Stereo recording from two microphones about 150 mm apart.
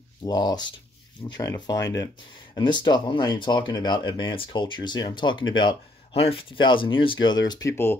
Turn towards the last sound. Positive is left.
turn(degrees=15)  # may be behind; listen again after turning